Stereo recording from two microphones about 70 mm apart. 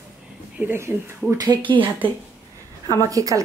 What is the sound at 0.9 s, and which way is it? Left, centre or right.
Speech, centre.